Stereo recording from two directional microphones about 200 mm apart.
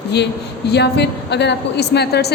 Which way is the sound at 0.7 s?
55° left (ahead or behind).